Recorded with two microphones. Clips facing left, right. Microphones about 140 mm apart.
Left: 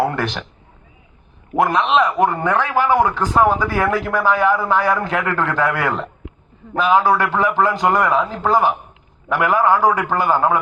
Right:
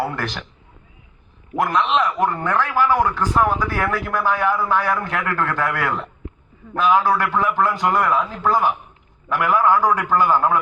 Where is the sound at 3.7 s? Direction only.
90° left.